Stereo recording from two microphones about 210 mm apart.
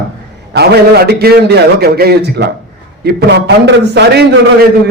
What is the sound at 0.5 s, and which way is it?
A man's voice, 50° right (ahead or behind).